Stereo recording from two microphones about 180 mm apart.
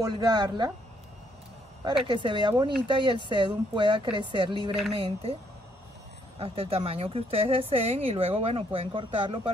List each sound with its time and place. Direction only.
0.0 s a woman's voice: 20° right (ahead or behind)
2.0 s a woman's voice: 25° right (ahead or behind)